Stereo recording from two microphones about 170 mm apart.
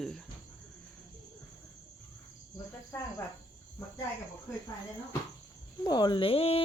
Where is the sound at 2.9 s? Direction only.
10° left (ahead or behind).